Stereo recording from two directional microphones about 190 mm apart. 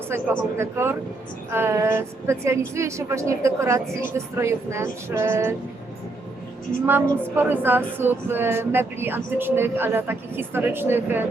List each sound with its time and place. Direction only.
0.1 s speech: 10° right (ahead or behind)
7.3 s speech: 10° right (ahead or behind)